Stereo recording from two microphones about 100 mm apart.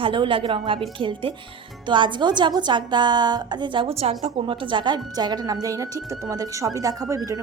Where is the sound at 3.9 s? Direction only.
75° right (ahead or behind).